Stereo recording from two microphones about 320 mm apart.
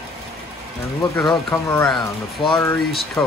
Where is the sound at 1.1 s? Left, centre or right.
Centre.